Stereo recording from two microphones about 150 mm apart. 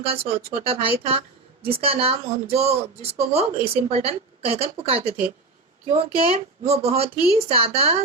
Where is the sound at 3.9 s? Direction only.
45° right (ahead or behind).